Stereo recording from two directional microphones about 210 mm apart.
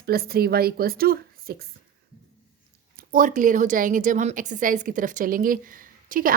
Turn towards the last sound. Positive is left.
turn(degrees=-40)  # may be behind; listen again after turning